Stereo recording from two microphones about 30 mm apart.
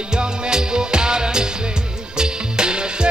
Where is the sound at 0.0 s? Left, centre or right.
Right.